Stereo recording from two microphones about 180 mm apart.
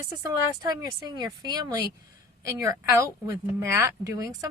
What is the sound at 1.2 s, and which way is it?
Speech, 20° right (ahead or behind).